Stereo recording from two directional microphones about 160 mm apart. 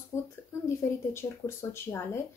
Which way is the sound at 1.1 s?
15° left (ahead or behind).